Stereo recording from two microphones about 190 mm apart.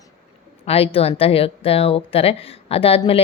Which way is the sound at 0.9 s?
30° left (ahead or behind).